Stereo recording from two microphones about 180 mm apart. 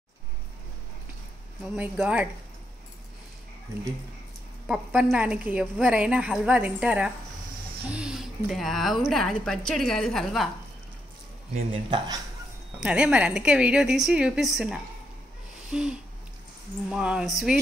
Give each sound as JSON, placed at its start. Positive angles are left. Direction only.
{"t": 1.8, "sound": "a woman's voice", "side_deg": -10}
{"t": 4.6, "sound": "a woman's voice", "side_deg": -5}
{"t": 11.5, "sound": "speech", "side_deg": -30}
{"t": 12.8, "sound": "speech", "side_deg": -5}